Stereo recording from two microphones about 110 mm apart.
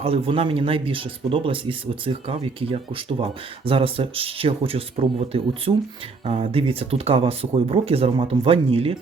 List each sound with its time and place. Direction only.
0.0 s speech: 60° right (ahead or behind)
6.2 s speech: 75° right (ahead or behind); by 9.0 s 55° right (ahead or behind)